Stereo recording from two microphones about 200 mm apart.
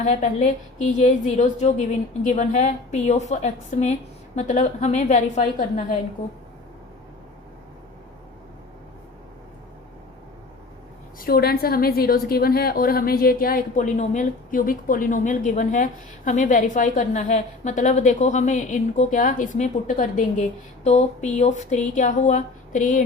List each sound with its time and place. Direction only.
0.0 s a woman's voice: 35° left (ahead or behind)
11.2 s a woman's voice: 50° left (ahead or behind)